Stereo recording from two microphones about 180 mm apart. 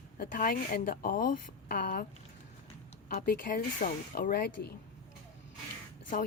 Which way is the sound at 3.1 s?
50° left (ahead or behind).